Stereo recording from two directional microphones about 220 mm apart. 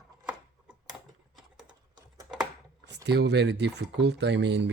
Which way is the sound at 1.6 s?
20° right (ahead or behind).